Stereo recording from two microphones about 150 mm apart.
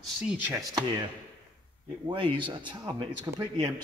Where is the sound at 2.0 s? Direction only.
30° right (ahead or behind).